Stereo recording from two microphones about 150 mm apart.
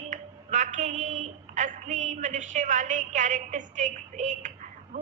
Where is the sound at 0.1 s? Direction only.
55° right (ahead or behind).